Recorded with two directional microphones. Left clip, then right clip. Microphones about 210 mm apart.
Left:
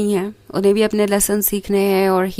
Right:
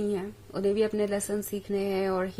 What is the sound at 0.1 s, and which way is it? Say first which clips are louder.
Speech: left 12 dB; 50° left (ahead or behind).